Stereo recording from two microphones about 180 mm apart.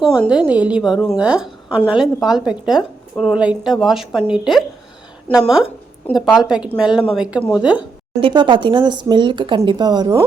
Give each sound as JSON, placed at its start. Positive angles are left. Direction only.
{"t": 0.3, "sound": "a woman's voice", "side_deg": -5}
{"t": 8.2, "sound": "speech", "side_deg": -25}